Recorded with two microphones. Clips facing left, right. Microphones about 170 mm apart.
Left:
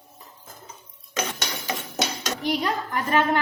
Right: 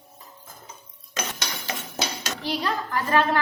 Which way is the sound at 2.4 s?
20° left (ahead or behind).